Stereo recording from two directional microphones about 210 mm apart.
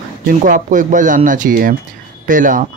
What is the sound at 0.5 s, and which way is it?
Speech, 40° right (ahead or behind).